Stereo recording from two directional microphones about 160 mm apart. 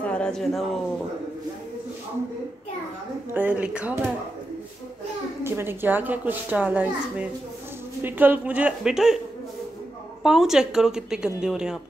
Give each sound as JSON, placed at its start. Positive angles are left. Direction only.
{"t": 0.0, "sound": "speech", "side_deg": 5}
{"t": 3.3, "sound": "a child's voice", "side_deg": -10}
{"t": 5.4, "sound": "a child's voice", "side_deg": -15}
{"t": 10.2, "sound": "a woman's voice", "side_deg": -5}